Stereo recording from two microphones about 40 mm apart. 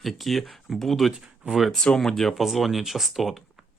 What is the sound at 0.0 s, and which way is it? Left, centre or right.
Speech, centre.